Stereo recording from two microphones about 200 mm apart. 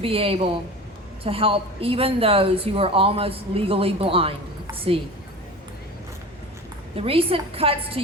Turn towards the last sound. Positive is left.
turn(degrees=-25)  # may be behind; listen again after turning